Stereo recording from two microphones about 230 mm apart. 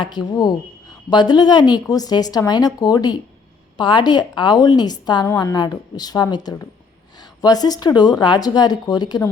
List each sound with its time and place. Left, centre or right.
0.0 s a woman's voice: centre